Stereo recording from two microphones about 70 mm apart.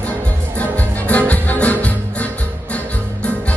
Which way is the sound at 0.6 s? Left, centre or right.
Left.